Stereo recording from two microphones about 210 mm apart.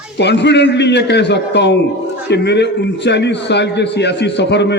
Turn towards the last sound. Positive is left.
turn(degrees=55)  # may be behind; listen again after turning